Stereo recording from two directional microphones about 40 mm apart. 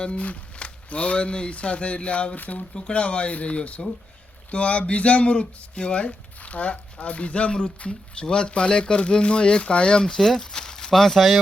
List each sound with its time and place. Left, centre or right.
0.0 s speech: left
2.3 s speech: left
2.7 s speech: left
10.2 s speech: centre
10.9 s speech: centre